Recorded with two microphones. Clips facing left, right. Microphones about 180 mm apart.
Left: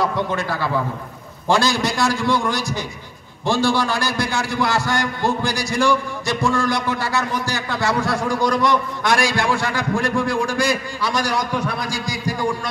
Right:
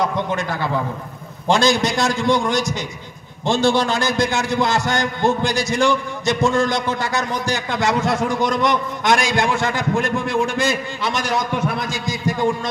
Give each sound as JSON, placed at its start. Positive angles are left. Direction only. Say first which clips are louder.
{"t": 0.0, "sound": "a man's voice", "louder": "even", "side_deg": -20}